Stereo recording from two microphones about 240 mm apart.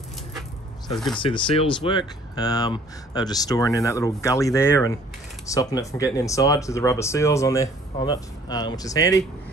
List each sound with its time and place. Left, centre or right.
1.1 s speech: left